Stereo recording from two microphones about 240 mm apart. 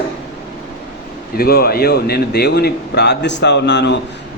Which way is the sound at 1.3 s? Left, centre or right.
Left.